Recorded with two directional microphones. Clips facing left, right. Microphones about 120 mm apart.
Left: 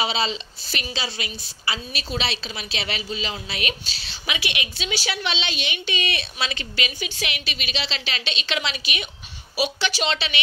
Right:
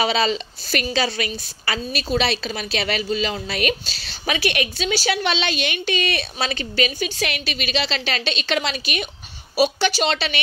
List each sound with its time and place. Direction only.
0.0 s a woman's voice: 50° right (ahead or behind)